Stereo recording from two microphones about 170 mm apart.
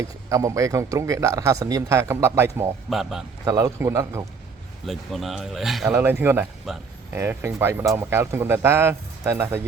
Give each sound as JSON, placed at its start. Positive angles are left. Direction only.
{"t": 0.0, "sound": "speech", "side_deg": -20}
{"t": 2.9, "sound": "speech", "side_deg": 0}
{"t": 3.4, "sound": "a man's voice", "side_deg": -20}
{"t": 4.9, "sound": "speech", "side_deg": 0}
{"t": 6.0, "sound": "speech", "side_deg": -15}